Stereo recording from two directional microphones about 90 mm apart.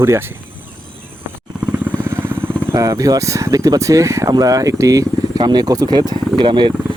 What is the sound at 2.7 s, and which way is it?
Speech, 40° right (ahead or behind).